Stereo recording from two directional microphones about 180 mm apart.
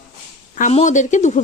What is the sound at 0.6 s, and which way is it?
Speech, 40° left (ahead or behind).